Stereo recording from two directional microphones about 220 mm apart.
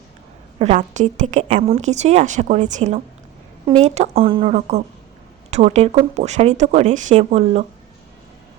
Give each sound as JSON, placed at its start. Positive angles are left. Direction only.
{"t": 0.6, "sound": "a woman's voice", "side_deg": -30}